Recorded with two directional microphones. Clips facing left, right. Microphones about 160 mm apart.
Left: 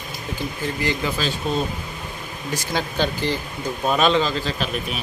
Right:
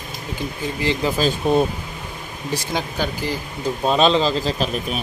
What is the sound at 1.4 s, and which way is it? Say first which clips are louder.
Speech: right 7 dB; 60° right (ahead or behind).